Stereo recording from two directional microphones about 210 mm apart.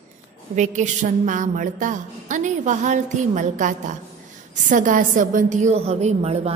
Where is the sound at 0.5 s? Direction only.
35° right (ahead or behind).